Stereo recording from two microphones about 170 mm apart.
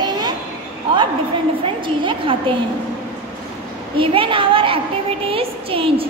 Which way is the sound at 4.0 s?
30° right (ahead or behind).